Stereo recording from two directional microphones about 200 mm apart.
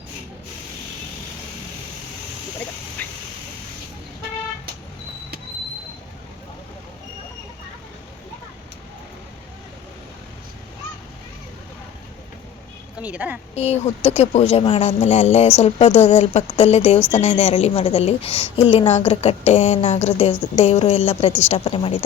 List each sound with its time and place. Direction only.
3.0 s a sound: 10° left (ahead or behind)
13.0 s speech: 5° right (ahead or behind)
13.6 s a woman's voice: 35° left (ahead or behind)